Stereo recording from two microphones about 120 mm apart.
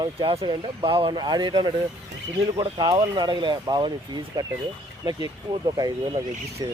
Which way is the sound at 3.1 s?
40° right (ahead or behind).